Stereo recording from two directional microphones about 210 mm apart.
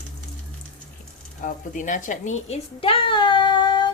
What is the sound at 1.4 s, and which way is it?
A child's voice, 40° left (ahead or behind).